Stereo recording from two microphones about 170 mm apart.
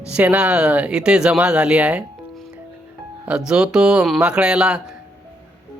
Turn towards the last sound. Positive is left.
turn(degrees=-5)  # may be behind; listen again after turning